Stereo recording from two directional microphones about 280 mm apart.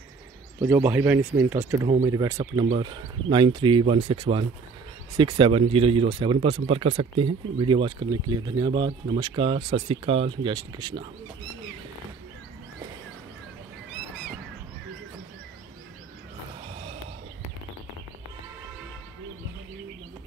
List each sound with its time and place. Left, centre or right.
0.6 s speech: centre